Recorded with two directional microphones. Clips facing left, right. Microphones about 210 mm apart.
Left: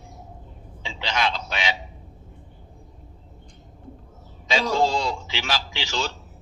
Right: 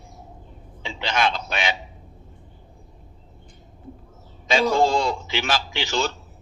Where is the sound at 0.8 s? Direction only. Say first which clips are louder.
Right 2 dB; 50° right (ahead or behind).